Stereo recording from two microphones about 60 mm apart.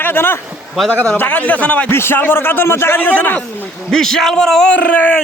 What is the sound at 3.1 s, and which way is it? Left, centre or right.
Speech, left.